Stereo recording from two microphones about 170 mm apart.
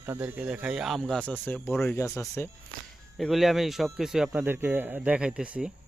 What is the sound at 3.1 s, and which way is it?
Speech, centre (ahead or behind).